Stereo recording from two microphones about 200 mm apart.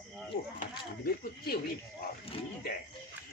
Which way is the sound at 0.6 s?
50° left (ahead or behind).